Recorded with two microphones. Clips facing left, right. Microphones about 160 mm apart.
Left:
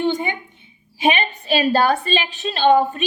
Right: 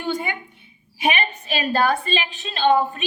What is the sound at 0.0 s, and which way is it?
A woman's voice, 20° left (ahead or behind).